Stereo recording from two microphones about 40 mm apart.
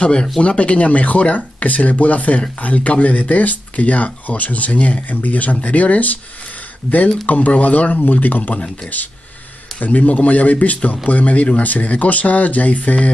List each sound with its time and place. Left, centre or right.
0.0 s speech: left
7.2 s speech: left
8.0 s speech: left